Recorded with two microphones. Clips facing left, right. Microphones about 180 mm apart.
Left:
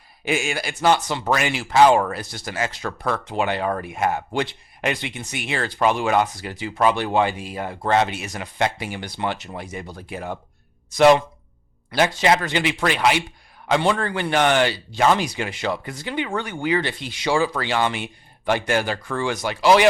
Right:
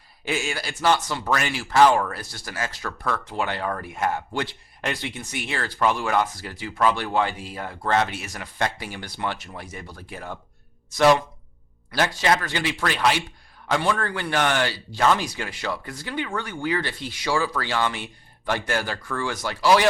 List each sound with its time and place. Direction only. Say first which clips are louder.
0.3 s speech: left 4 dB; 15° left (ahead or behind)